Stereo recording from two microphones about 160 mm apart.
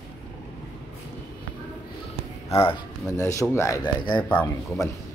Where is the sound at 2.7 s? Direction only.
20° left (ahead or behind).